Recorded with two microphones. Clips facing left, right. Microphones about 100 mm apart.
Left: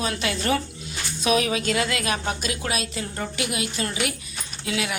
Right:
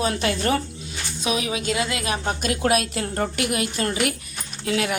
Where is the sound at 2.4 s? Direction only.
50° right (ahead or behind).